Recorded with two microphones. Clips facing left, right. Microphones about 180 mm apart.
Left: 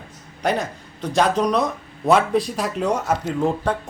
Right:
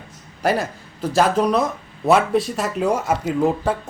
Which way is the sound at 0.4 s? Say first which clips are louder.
Right 2 dB; 5° right (ahead or behind).